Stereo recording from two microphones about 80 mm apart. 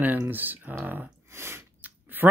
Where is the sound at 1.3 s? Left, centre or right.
Right.